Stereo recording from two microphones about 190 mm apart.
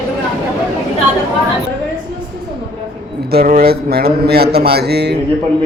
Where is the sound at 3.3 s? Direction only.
55° right (ahead or behind).